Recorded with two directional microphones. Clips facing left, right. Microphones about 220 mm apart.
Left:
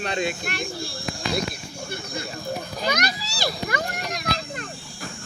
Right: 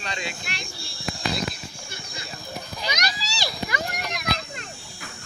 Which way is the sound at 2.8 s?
55° left (ahead or behind).